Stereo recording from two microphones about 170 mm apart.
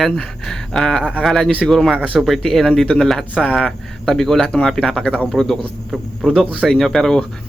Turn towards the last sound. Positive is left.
turn(degrees=5)  # may be behind; listen again after turning